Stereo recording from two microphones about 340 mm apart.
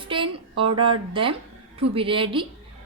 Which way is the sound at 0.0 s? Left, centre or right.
Centre.